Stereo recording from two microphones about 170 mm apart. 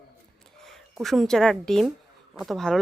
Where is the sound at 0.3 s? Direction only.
5° left (ahead or behind).